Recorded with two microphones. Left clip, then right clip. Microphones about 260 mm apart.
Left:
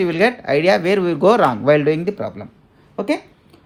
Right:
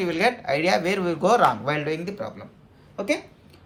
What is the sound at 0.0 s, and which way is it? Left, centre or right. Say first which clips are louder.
Speech: left 6 dB; left.